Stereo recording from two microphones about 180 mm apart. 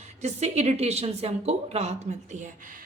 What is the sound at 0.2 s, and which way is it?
A woman's voice, 40° right (ahead or behind).